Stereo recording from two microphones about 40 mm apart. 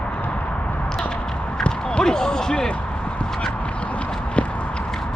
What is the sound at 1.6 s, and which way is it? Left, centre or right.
Basketball bounce, left.